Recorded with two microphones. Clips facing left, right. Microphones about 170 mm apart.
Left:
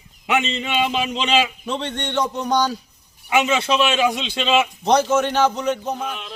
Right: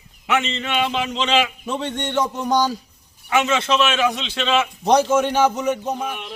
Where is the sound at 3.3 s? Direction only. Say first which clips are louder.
Even; 10° left (ahead or behind).